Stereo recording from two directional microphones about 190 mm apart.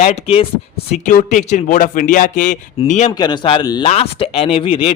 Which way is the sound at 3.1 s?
20° left (ahead or behind).